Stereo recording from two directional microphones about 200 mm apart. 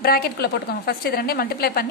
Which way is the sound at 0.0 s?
50° left (ahead or behind).